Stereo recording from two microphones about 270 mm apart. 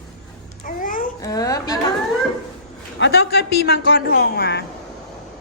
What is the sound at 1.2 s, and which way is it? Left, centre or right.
Speech, centre.